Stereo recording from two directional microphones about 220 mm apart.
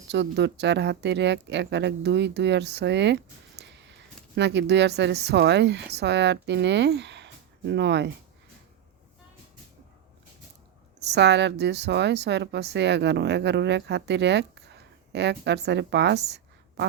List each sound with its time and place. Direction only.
0.1 s a woman's voice: 50° right (ahead or behind)
11.0 s a woman's voice: 50° right (ahead or behind)